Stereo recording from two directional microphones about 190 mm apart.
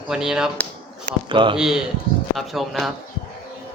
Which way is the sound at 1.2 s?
25° right (ahead or behind).